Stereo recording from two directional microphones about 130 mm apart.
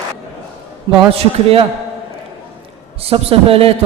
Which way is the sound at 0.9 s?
45° right (ahead or behind).